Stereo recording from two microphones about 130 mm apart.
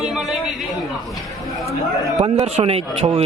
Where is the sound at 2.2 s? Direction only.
50° right (ahead or behind).